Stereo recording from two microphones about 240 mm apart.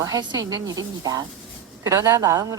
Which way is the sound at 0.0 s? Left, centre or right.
Centre.